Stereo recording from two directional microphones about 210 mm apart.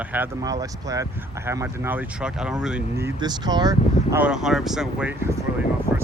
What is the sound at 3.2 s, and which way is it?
Speech, 20° right (ahead or behind).